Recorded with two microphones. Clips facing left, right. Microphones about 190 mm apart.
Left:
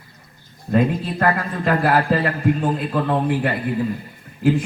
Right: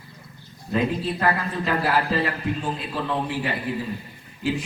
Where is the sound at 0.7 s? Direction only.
50° left (ahead or behind).